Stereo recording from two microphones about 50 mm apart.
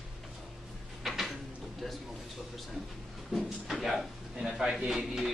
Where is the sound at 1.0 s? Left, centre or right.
Centre.